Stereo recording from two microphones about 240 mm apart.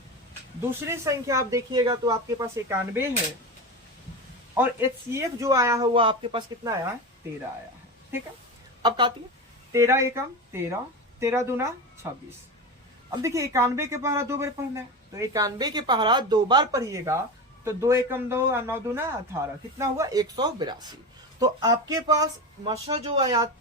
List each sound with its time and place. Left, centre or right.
0.7 s a man's voice: centre
4.5 s a man's voice: centre
8.8 s a woman's voice: centre
11.2 s a man's voice: centre